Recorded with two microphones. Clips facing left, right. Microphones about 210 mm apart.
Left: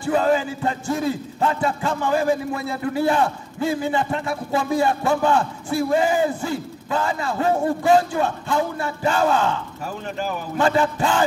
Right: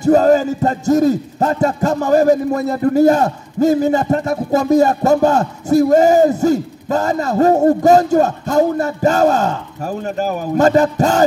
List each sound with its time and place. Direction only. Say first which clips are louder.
0.0 s speech: right 8 dB; 40° right (ahead or behind)